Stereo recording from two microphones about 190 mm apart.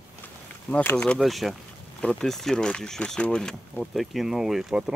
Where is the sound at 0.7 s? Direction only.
10° left (ahead or behind).